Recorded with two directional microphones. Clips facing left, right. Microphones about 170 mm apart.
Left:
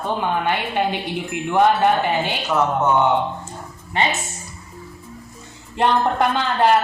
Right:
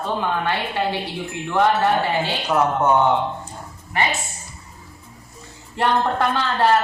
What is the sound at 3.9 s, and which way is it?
Speech, 25° left (ahead or behind).